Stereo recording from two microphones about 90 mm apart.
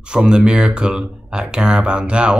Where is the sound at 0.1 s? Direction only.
10° right (ahead or behind).